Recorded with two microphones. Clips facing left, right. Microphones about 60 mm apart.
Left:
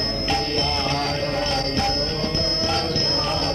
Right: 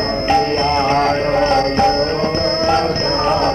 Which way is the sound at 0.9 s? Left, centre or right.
Right.